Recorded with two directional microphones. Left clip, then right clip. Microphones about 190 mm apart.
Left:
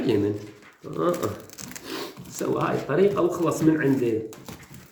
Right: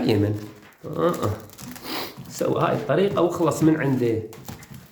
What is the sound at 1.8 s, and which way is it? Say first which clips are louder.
Speech: right 4 dB; 50° right (ahead or behind).